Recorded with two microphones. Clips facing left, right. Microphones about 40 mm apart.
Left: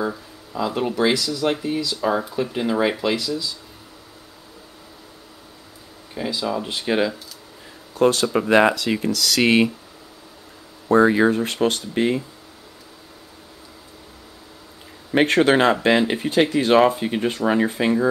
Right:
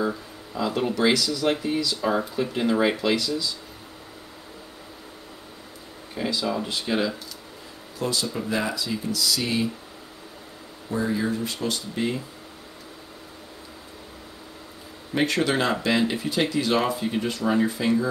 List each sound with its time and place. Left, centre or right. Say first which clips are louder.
0.0 s speech: left 1 dB; centre
6.3 s speech: left 2 dB; centre
6.8 s speech: left 6 dB; left
8.0 s speech: left 10 dB; left
10.9 s speech: left 10 dB; left
15.1 s speech: left 7 dB; left